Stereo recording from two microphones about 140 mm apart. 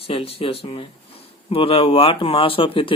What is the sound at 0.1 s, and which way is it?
Speech, 40° left (ahead or behind).